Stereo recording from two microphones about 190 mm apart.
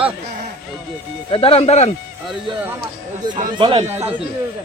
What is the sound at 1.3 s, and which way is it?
Speech, 30° left (ahead or behind).